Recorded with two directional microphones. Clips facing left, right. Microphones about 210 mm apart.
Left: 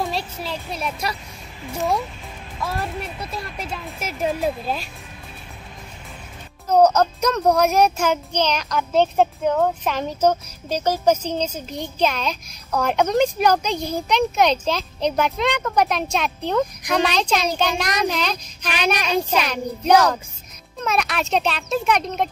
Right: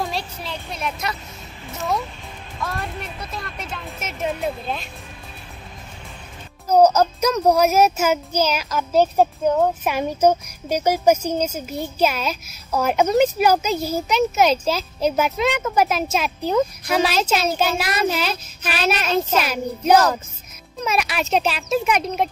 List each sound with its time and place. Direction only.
0.0 s a child's voice: centre (ahead or behind)
2.6 s speech: 5° left (ahead or behind)
6.7 s speech: centre (ahead or behind)